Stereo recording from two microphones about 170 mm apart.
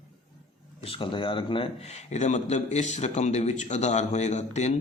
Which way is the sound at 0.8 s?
30° left (ahead or behind).